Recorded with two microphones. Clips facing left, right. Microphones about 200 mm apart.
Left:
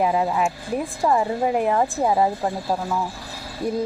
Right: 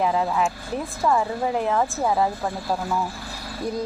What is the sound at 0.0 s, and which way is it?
Speech, 10° left (ahead or behind).